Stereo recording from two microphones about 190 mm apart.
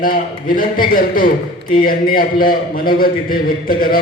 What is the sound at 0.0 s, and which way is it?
A man's voice, 45° left (ahead or behind).